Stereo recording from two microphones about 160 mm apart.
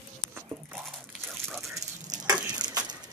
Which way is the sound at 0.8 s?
Centre (ahead or behind).